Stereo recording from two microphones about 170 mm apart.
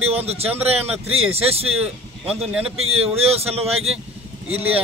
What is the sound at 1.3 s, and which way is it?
Speech, 35° right (ahead or behind).